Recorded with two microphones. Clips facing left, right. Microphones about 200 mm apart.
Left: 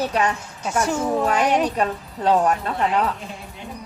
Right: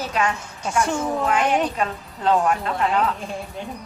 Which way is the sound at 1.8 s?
35° left (ahead or behind).